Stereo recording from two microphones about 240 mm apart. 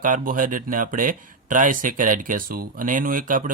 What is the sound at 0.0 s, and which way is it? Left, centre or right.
Speech, right.